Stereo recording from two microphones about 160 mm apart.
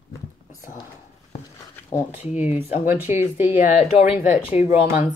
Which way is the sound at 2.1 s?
10° right (ahead or behind).